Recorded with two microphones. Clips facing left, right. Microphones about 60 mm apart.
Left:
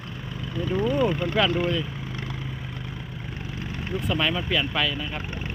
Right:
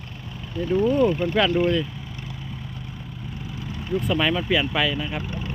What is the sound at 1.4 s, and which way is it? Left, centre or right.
Speech, centre.